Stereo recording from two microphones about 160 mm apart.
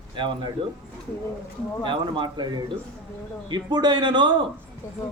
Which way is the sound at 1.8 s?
30° right (ahead or behind).